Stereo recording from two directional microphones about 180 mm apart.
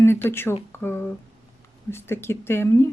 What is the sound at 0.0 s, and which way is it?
Speech, 15° left (ahead or behind).